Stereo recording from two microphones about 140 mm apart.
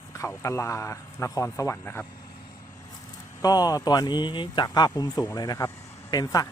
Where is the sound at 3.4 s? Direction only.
25° left (ahead or behind).